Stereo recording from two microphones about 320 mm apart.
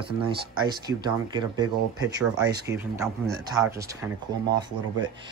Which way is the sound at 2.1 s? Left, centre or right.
Right.